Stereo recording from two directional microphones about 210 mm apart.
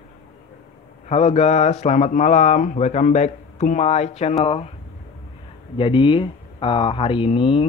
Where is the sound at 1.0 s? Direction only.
30° left (ahead or behind).